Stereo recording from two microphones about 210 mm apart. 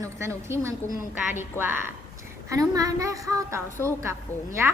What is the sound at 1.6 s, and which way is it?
Speech, 10° left (ahead or behind).